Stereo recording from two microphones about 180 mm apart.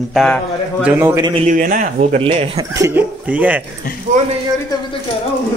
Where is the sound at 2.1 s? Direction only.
30° right (ahead or behind).